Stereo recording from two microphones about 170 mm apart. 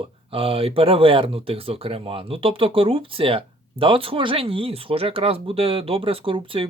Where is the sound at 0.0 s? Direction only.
35° right (ahead or behind).